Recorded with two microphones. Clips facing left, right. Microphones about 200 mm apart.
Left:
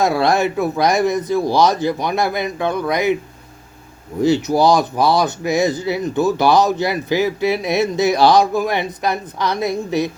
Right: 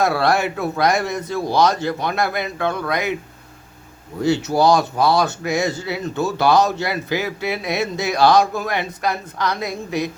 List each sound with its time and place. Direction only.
0.0 s speech: 20° left (ahead or behind)
4.2 s speech: 20° left (ahead or behind)